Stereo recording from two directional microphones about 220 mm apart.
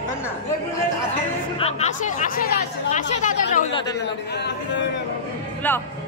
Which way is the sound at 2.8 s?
35° left (ahead or behind).